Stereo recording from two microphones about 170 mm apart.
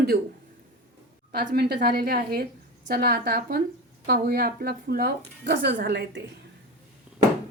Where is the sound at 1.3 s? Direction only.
75° right (ahead or behind).